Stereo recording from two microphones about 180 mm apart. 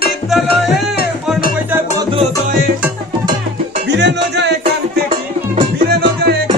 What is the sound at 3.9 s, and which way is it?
Music, 75° right (ahead or behind).